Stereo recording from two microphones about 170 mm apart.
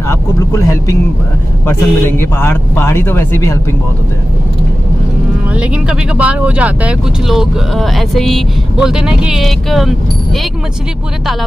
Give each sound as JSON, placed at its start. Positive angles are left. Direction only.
{"t": 0.1, "sound": "a man's voice", "side_deg": 15}
{"t": 5.5, "sound": "speech", "side_deg": -5}